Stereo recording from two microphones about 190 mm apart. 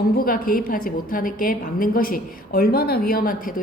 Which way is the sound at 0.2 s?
50° left (ahead or behind).